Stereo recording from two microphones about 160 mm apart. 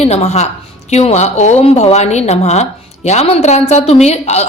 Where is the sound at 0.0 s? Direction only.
40° left (ahead or behind).